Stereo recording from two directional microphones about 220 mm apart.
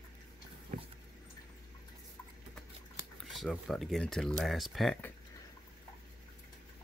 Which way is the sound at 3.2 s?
Centre (ahead or behind).